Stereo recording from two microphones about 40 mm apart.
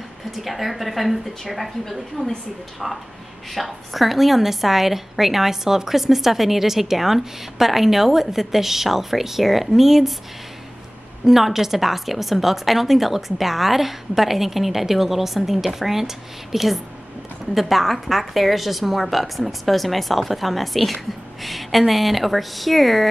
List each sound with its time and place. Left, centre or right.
0.3 s a woman's voice: centre
2.2 s a woman's voice: left
3.5 s a woman's voice: centre
11.2 s a woman's voice: centre